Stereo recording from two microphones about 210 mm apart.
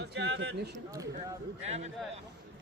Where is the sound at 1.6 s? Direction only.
30° right (ahead or behind).